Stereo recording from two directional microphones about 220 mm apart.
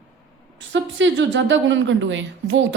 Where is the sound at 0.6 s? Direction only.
55° right (ahead or behind).